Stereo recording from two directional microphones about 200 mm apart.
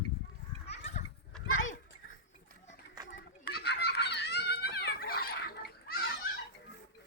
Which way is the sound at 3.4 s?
50° left (ahead or behind).